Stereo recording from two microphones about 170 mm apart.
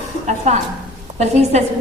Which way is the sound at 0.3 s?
40° right (ahead or behind).